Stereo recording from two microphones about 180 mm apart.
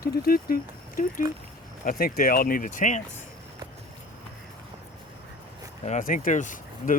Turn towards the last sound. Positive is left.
turn(degrees=45)  # may be behind; listen again after turning